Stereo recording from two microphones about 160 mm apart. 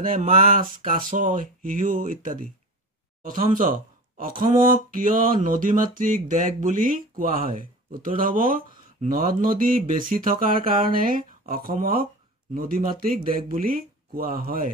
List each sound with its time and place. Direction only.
0.0 s speech: 55° right (ahead or behind)